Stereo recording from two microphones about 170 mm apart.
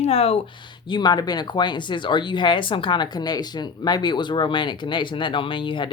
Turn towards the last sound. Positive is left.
turn(degrees=30)  # may be behind; listen again after turning